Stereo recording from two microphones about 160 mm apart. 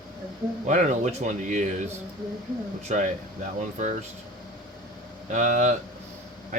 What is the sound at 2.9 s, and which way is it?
Speech, 45° right (ahead or behind).